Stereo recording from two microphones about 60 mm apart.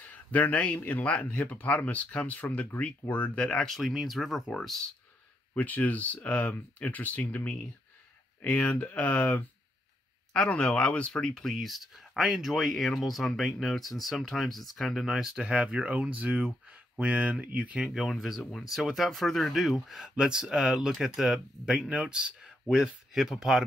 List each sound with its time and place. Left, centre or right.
0.0 s speech: left
3.6 s speech: centre
5.6 s speech: left; by 11.5 s centre
11.5 s speech: centre
15.4 s speech: right
17.7 s speech: centre
18.0 s speech: centre